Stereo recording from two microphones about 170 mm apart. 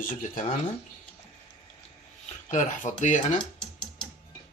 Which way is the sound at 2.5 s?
45° left (ahead or behind).